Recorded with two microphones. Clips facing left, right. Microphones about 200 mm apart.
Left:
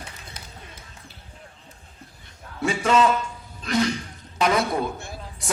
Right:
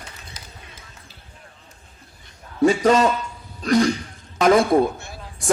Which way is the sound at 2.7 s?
40° right (ahead or behind).